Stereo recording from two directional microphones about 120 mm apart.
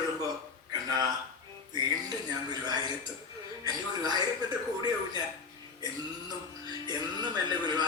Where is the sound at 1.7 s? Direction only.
35° right (ahead or behind).